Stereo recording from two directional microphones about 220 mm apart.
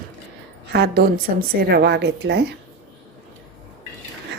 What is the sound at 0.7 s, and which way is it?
A woman's voice, 45° right (ahead or behind).